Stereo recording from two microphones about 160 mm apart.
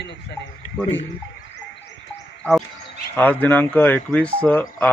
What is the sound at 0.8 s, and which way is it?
Speech, 15° left (ahead or behind).